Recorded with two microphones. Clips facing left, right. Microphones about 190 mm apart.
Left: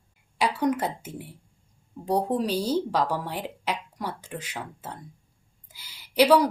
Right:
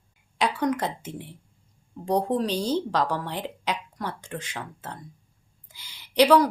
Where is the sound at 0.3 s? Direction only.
10° left (ahead or behind).